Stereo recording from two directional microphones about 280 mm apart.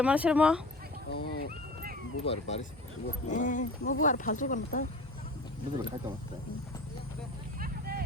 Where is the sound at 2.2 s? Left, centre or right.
Left.